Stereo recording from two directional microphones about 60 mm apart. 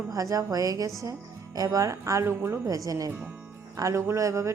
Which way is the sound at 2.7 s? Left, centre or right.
Right.